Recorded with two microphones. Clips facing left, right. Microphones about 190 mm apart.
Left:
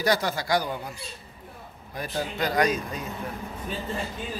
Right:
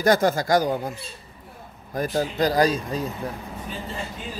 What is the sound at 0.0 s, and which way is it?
Speech, 45° right (ahead or behind).